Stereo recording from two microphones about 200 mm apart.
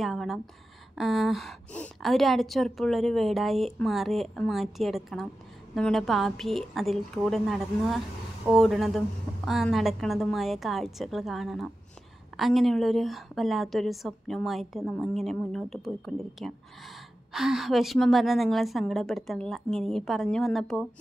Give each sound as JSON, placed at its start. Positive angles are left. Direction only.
{"t": 0.0, "sound": "a woman's voice", "side_deg": 0}